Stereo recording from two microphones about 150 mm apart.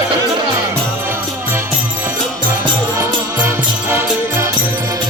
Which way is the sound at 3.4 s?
15° right (ahead or behind).